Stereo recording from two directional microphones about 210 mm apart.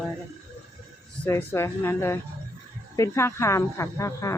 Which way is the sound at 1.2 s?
10° left (ahead or behind).